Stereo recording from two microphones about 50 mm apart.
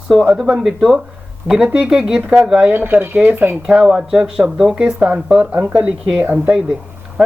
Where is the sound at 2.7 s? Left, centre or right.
Right.